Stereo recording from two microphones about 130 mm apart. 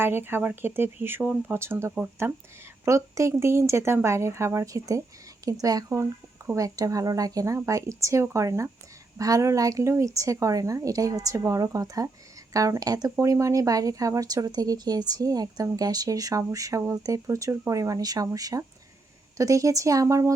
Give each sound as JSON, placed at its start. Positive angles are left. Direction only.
{"t": 0.0, "sound": "speech", "side_deg": -15}